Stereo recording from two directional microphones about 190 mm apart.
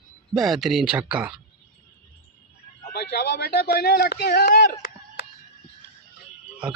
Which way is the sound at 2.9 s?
60° left (ahead or behind).